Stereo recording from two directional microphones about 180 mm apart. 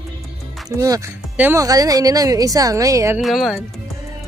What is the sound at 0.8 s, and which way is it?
Speech, 15° right (ahead or behind).